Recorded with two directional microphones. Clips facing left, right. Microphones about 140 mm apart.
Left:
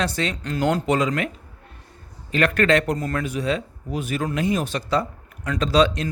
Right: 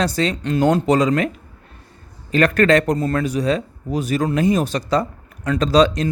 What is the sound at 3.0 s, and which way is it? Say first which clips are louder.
Speech: right 6 dB; 30° right (ahead or behind).